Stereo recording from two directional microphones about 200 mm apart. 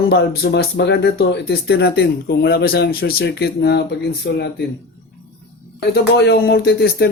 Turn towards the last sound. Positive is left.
turn(degrees=50)  # may be behind; listen again after turning